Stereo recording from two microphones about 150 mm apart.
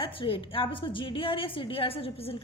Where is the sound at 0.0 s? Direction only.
35° left (ahead or behind).